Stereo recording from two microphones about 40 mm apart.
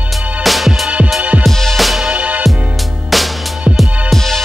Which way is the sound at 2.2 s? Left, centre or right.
Right.